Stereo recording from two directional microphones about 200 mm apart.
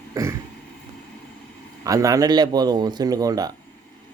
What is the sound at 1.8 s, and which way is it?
Speech, 15° right (ahead or behind).